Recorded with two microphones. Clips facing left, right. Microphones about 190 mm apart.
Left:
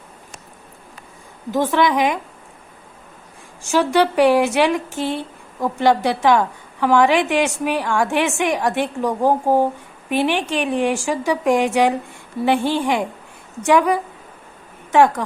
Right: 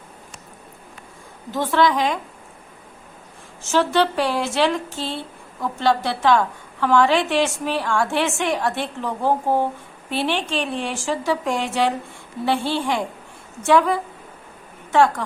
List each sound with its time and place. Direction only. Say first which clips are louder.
1.5 s speech: left 2 dB; 15° left (ahead or behind)
3.6 s speech: left 2 dB; 15° left (ahead or behind)